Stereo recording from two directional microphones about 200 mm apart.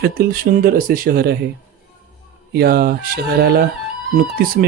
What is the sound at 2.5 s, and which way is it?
Speech, 50° right (ahead or behind).